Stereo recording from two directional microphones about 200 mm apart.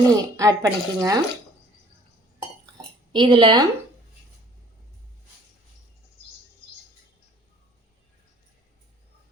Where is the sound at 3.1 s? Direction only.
25° right (ahead or behind).